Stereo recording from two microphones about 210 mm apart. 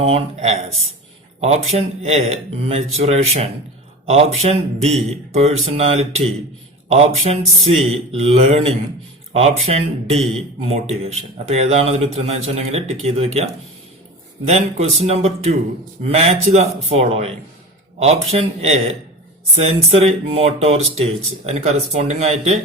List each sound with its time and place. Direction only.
0.0 s speech: 30° right (ahead or behind)
1.7 s speech: 30° right (ahead or behind)
18.6 s speech: 30° right (ahead or behind)